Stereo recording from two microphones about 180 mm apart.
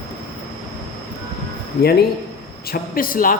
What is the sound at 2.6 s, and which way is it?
Speech, 55° left (ahead or behind).